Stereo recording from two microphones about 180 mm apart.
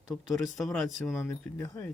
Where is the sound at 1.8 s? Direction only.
10° left (ahead or behind).